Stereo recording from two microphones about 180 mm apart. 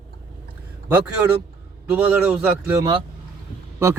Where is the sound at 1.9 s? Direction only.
5° right (ahead or behind).